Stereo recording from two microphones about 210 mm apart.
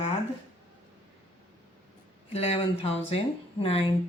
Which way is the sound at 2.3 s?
30° left (ahead or behind).